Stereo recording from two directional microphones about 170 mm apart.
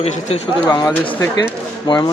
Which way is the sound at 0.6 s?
20° left (ahead or behind).